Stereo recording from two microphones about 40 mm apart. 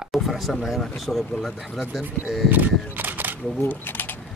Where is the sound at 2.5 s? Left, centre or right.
Right.